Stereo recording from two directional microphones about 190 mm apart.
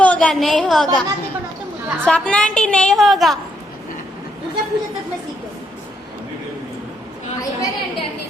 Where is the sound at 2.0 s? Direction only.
5° left (ahead or behind).